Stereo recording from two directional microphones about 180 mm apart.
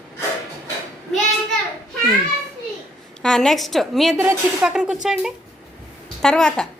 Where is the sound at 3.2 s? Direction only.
5° left (ahead or behind).